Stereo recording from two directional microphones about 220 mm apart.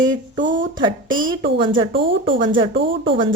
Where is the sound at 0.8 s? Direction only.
20° right (ahead or behind).